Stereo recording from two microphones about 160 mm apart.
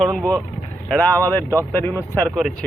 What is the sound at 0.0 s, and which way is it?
Speech, 5° left (ahead or behind).